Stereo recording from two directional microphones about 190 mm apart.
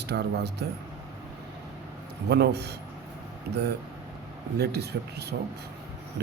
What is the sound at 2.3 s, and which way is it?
Speech, 60° right (ahead or behind).